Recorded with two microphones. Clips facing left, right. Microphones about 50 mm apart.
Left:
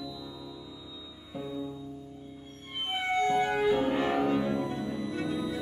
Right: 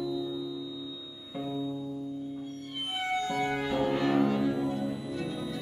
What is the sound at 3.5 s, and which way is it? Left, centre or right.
Music, centre.